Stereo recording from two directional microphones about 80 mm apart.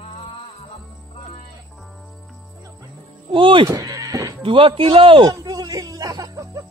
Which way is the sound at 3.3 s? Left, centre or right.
Right.